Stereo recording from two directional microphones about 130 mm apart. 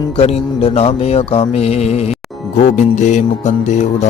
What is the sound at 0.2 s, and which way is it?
Speech, 50° left (ahead or behind).